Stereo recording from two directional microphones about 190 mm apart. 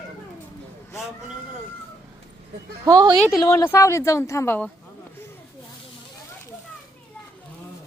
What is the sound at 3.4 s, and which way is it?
Speech, 15° left (ahead or behind).